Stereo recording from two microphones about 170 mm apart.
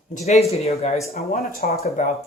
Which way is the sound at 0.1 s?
40° left (ahead or behind).